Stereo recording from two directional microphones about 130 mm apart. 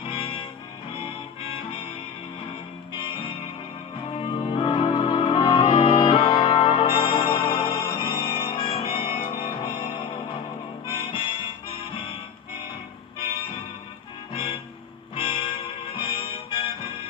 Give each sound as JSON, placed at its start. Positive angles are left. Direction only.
{"t": 0.0, "sound": "music", "side_deg": 45}
{"t": 2.9, "sound": "music", "side_deg": 40}
{"t": 15.1, "sound": "music", "side_deg": 40}